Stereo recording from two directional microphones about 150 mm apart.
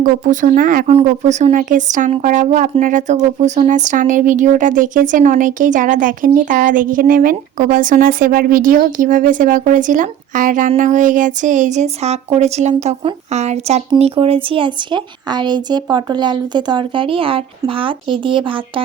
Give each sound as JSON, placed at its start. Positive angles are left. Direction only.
{"t": 0.0, "sound": "speech", "side_deg": -60}
{"t": 0.9, "sound": "a woman's voice", "side_deg": -50}